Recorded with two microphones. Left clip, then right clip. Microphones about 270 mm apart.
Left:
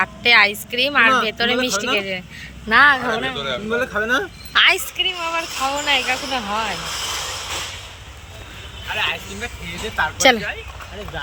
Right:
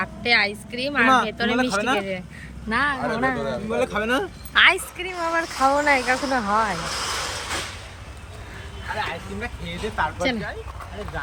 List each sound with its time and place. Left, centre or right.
0.0 s a woman's voice: centre
3.2 s speech: right
3.8 s speech: centre
4.5 s speech: centre
9.0 s speech: centre